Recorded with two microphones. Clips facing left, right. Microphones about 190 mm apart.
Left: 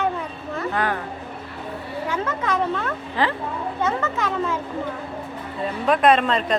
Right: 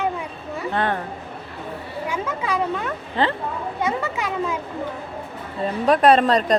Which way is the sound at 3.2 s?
25° right (ahead or behind).